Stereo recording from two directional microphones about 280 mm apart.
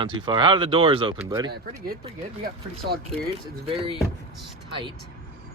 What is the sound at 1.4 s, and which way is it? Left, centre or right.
Speech, right.